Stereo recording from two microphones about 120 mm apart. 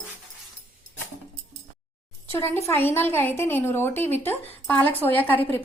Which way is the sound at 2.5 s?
20° left (ahead or behind).